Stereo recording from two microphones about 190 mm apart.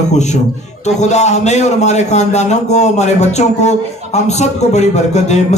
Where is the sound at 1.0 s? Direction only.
35° left (ahead or behind).